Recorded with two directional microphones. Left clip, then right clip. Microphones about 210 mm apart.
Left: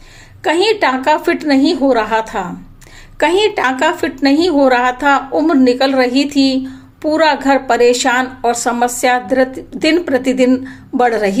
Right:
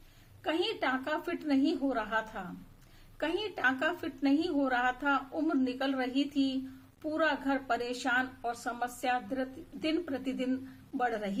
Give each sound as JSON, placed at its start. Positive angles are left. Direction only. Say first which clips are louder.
{"t": 0.4, "sound": "a woman's voice", "louder": "left 19 dB", "side_deg": 20}